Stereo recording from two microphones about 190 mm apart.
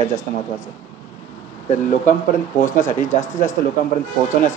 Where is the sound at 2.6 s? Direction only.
40° left (ahead or behind).